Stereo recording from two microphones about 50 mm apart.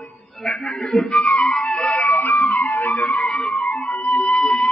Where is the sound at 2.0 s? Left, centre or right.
Left.